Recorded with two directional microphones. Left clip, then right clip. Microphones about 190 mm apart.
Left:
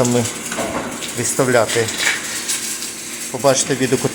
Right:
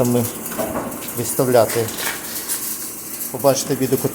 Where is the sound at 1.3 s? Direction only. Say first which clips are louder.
Even; centre (ahead or behind).